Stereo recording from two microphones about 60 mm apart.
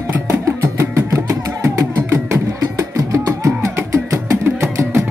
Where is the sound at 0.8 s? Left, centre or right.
Right.